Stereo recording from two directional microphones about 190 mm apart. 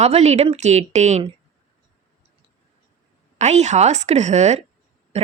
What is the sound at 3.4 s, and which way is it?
A woman's voice, 35° right (ahead or behind).